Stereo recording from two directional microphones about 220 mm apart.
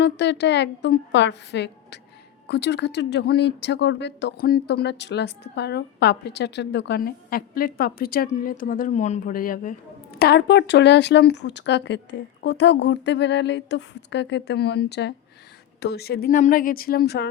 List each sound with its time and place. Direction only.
0.0 s speech: 50° left (ahead or behind)